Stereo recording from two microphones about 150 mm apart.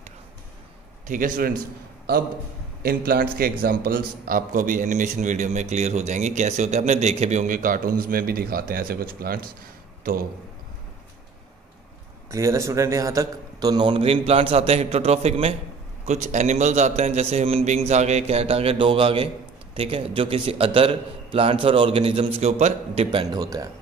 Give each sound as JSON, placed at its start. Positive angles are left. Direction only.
{"t": 1.0, "sound": "a man's voice", "side_deg": -65}
{"t": 2.8, "sound": "a man's voice", "side_deg": -90}
{"t": 12.3, "sound": "a man's voice", "side_deg": -20}
{"t": 23.4, "sound": "speech", "side_deg": -25}